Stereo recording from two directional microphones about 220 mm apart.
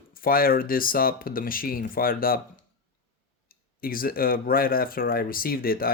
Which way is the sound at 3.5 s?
40° left (ahead or behind).